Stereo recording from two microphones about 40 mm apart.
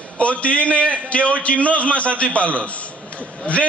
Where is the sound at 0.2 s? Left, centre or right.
Left.